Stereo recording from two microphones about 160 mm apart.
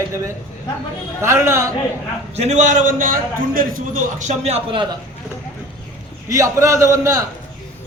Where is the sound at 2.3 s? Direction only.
45° right (ahead or behind).